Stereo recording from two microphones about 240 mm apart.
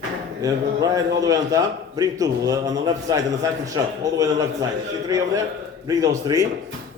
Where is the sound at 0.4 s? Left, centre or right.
Centre.